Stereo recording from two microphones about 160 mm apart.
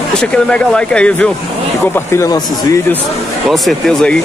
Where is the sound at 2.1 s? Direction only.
20° left (ahead or behind).